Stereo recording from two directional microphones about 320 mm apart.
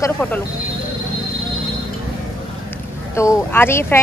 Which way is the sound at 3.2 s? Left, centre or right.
Centre.